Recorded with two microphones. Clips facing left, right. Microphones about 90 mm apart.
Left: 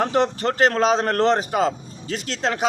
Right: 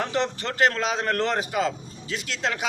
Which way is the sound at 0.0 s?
40° left (ahead or behind).